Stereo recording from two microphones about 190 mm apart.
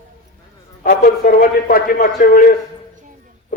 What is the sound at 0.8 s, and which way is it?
A man's voice, 50° left (ahead or behind).